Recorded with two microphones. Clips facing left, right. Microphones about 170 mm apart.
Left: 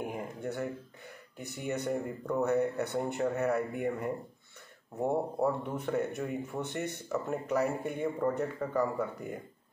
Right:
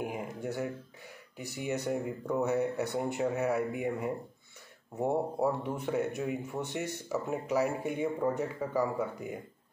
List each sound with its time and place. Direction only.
0.0 s speech: 5° right (ahead or behind)